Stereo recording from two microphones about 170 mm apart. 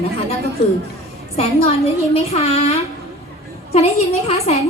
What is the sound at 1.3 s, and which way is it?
A woman's voice, 40° left (ahead or behind).